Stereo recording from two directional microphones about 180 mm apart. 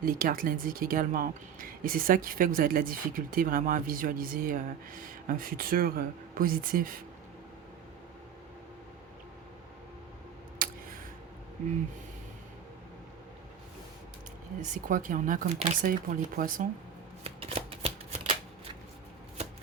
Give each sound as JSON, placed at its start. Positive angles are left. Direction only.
{"t": 0.0, "sound": "speech", "side_deg": -50}
{"t": 10.6, "sound": "a sound", "side_deg": -50}
{"t": 14.6, "sound": "speech", "side_deg": -45}
{"t": 17.2, "sound": "shuffling cards", "side_deg": -30}